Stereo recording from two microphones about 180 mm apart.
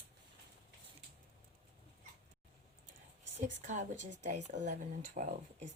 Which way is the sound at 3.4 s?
45° right (ahead or behind).